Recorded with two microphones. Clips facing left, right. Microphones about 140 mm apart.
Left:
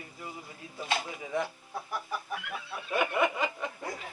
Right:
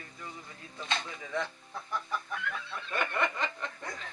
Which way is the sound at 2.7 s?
10° left (ahead or behind).